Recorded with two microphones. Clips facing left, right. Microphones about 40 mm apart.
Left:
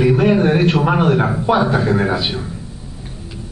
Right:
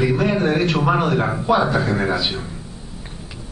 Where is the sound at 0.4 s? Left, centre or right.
Left.